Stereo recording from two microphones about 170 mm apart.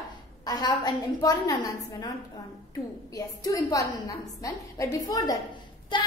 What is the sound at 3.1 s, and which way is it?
A woman's voice, 20° left (ahead or behind).